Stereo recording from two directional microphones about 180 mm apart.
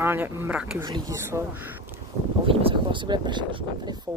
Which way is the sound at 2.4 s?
30° right (ahead or behind).